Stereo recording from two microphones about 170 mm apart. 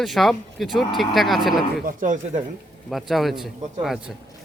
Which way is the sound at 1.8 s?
50° right (ahead or behind).